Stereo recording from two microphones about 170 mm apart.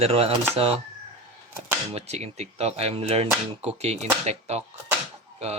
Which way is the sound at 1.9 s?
40° right (ahead or behind).